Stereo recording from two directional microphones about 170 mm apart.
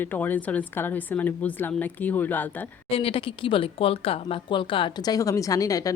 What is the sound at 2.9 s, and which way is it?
Speech, 35° left (ahead or behind).